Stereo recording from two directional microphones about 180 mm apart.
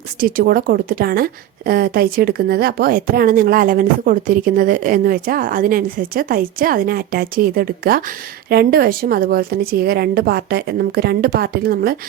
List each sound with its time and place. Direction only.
0.2 s a woman's voice: 55° right (ahead or behind)